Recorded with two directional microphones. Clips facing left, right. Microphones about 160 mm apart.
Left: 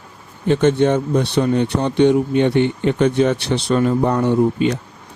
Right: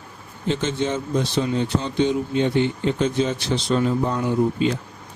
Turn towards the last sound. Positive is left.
turn(degrees=70)  # may be behind; listen again after turning